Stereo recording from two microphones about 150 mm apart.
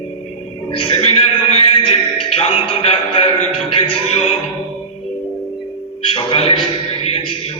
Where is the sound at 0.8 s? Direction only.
35° left (ahead or behind).